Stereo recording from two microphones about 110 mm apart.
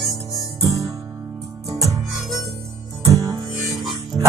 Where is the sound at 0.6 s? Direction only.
30° right (ahead or behind).